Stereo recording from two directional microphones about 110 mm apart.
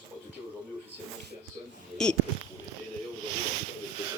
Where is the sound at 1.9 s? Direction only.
10° left (ahead or behind).